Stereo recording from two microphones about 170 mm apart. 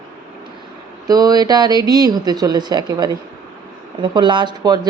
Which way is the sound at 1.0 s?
20° right (ahead or behind).